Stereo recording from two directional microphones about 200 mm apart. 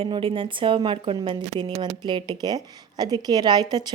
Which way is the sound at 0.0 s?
25° right (ahead or behind).